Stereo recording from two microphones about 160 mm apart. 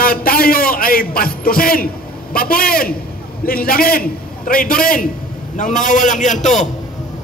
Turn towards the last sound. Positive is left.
turn(degrees=50)  # may be behind; listen again after turning